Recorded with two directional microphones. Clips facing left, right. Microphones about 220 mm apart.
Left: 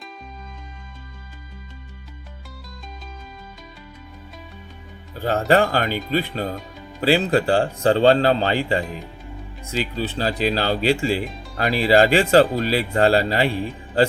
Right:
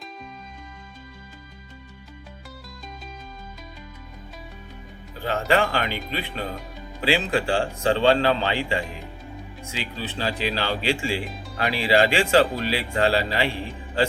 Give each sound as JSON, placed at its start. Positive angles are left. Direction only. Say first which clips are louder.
{"t": 5.2, "sound": "speech", "louder": "left 4 dB", "side_deg": 40}